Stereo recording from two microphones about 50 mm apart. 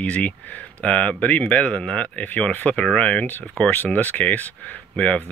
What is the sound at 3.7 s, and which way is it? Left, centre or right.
Speech, left.